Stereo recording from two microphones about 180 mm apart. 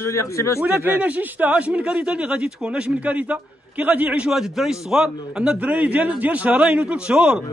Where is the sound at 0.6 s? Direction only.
10° right (ahead or behind).